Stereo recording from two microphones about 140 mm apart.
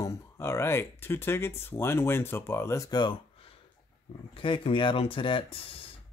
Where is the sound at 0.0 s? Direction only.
20° left (ahead or behind).